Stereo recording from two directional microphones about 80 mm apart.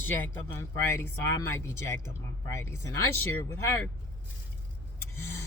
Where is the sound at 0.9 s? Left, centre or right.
Left.